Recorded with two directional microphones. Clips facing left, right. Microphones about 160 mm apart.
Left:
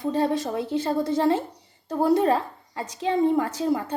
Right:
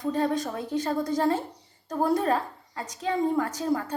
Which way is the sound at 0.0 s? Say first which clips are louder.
Left 2 dB; 25° left (ahead or behind).